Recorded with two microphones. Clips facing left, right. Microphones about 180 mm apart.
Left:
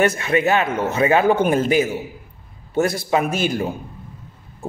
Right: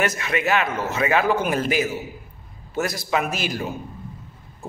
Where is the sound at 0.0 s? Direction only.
30° left (ahead or behind).